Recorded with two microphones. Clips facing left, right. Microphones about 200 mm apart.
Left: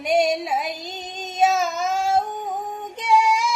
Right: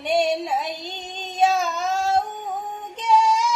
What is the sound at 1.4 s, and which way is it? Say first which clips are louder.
Child singing: left 1 dB; 5° left (ahead or behind).